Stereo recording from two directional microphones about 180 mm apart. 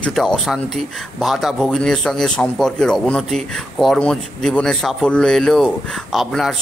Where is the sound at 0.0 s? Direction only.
5° left (ahead or behind).